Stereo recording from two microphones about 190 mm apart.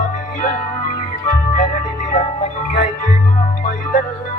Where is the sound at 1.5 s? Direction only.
40° left (ahead or behind).